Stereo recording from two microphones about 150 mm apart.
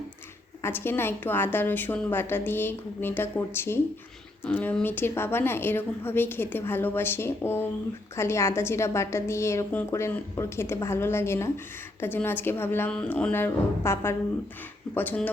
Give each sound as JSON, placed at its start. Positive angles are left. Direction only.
{"t": 0.6, "sound": "a woman's voice", "side_deg": 15}